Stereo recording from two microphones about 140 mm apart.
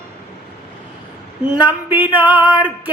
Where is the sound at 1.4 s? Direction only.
10° right (ahead or behind).